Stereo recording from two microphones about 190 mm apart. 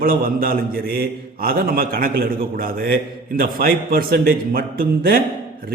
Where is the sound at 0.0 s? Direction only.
50° right (ahead or behind).